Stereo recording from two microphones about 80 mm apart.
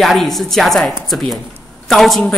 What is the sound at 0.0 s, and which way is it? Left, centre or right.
A woman's voice, centre.